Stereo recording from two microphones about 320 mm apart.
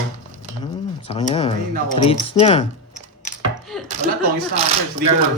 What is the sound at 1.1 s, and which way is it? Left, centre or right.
Speech, centre.